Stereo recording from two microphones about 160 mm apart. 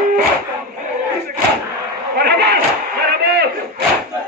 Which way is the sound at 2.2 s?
90° right.